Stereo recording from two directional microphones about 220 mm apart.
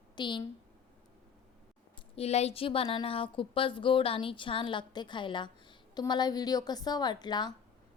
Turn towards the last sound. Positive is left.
turn(degrees=20)  # may be behind; listen again after turning